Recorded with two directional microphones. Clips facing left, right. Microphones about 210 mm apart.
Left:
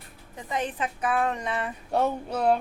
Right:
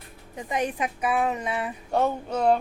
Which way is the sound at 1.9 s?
5° left (ahead or behind).